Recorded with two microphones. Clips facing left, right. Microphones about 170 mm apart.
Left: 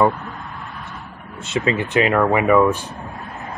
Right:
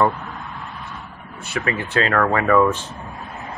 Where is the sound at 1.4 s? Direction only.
20° left (ahead or behind).